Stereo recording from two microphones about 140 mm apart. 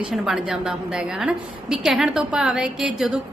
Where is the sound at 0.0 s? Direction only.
5° right (ahead or behind).